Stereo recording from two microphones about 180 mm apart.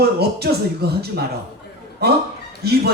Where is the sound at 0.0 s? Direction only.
60° right (ahead or behind).